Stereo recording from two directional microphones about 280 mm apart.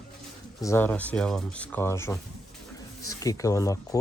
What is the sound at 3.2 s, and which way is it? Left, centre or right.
Speech, centre.